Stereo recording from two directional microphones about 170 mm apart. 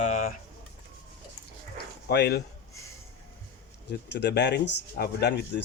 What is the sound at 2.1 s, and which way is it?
Speech, 75° left (ahead or behind).